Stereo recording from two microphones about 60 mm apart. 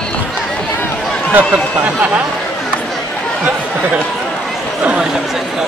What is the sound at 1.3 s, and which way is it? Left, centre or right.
Speech, right.